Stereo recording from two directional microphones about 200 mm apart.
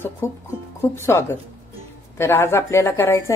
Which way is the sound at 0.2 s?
10° left (ahead or behind).